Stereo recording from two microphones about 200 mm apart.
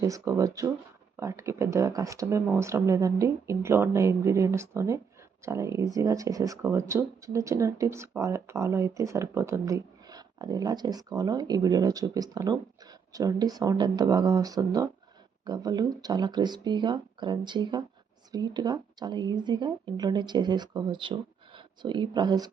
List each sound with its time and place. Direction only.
0.0 s speech: 15° right (ahead or behind)